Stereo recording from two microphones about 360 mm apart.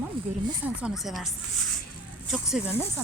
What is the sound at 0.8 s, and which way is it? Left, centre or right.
A woman's voice, centre.